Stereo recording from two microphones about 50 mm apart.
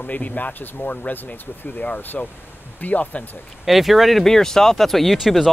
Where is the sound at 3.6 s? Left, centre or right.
Centre.